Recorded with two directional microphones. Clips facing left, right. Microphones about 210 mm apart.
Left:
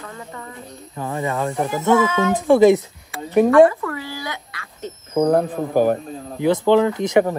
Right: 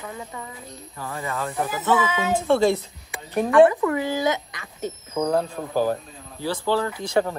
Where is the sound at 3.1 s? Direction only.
15° right (ahead or behind).